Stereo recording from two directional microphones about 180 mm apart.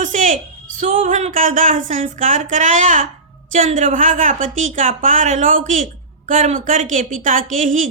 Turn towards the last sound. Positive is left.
turn(degrees=-45)  # may be behind; listen again after turning